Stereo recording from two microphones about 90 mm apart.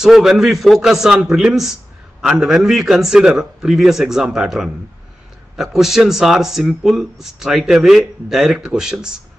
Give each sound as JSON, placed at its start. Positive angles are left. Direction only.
{"t": 0.0, "sound": "speech", "side_deg": -5}